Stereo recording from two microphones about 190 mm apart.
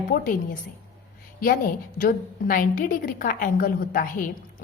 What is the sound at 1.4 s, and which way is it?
A woman's voice, 50° left (ahead or behind).